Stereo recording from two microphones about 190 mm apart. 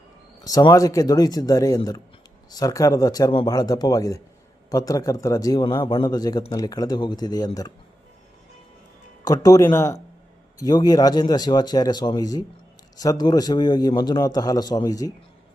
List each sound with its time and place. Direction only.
0.4 s a man's voice: 20° left (ahead or behind)
9.2 s a man's voice: 20° left (ahead or behind)